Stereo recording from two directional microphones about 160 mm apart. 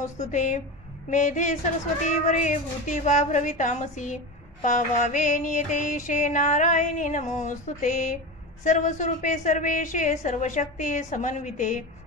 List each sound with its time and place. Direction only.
0.0 s music: 50° left (ahead or behind)